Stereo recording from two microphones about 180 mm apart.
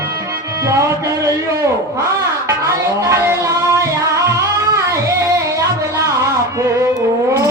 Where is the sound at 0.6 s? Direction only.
15° right (ahead or behind).